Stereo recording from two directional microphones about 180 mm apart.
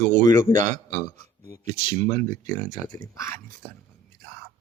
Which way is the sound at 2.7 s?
50° right (ahead or behind).